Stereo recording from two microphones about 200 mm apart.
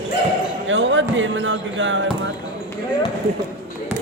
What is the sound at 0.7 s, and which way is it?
Speech, 70° right (ahead or behind).